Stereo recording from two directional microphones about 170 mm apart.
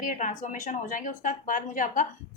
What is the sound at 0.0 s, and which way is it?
Speech, 50° left (ahead or behind).